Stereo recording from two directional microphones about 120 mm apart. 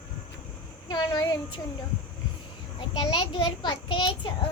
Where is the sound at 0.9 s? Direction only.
35° left (ahead or behind).